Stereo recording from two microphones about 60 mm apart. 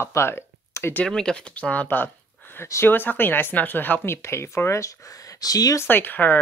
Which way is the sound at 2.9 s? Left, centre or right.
Left.